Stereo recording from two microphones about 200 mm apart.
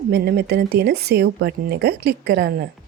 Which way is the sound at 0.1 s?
55° right (ahead or behind).